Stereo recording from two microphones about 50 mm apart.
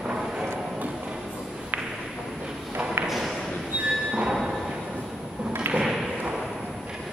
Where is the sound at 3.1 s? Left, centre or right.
Centre.